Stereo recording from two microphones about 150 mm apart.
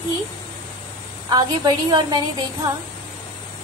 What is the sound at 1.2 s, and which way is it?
Speech, 30° right (ahead or behind).